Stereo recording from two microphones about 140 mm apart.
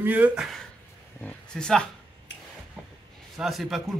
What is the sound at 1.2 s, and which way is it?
Speech, 5° left (ahead or behind).